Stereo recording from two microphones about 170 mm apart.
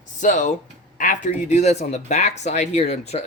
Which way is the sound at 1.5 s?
40° left (ahead or behind).